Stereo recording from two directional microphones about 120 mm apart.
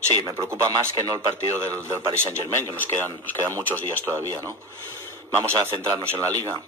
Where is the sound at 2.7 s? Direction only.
15° left (ahead or behind).